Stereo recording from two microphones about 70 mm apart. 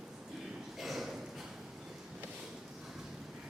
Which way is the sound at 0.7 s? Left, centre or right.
Centre.